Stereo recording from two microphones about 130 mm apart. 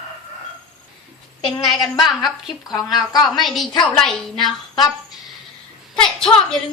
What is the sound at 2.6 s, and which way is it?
Speech, 30° left (ahead or behind).